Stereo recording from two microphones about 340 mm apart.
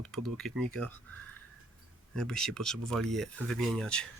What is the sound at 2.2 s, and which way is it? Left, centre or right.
Speech, centre.